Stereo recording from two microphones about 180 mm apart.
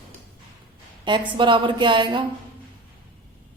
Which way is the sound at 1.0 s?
25° right (ahead or behind).